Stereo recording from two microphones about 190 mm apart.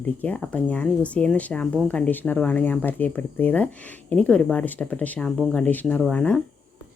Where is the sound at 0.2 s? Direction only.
10° left (ahead or behind).